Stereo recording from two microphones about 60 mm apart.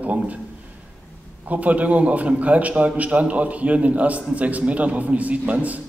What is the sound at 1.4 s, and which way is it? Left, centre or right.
A man's voice, right.